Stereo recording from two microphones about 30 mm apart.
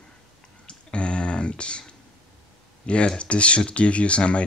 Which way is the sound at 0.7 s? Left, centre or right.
Left.